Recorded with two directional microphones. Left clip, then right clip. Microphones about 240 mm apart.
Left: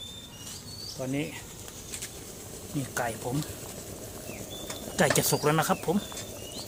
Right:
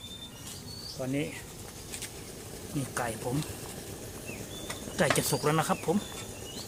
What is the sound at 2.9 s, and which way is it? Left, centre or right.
Stir, centre.